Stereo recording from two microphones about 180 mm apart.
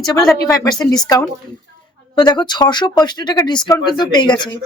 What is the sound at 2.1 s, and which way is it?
Speech, 25° left (ahead or behind).